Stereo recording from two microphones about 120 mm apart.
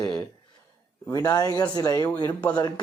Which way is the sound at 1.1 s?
30° left (ahead or behind).